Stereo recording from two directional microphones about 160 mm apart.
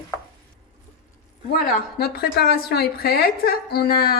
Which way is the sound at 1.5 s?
75° left (ahead or behind).